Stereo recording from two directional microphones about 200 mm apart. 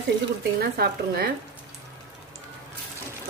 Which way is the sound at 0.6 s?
50° right (ahead or behind).